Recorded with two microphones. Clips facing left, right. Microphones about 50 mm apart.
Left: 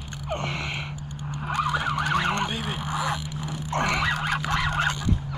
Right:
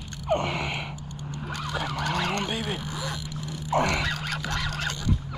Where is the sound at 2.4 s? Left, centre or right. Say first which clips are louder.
Even; centre.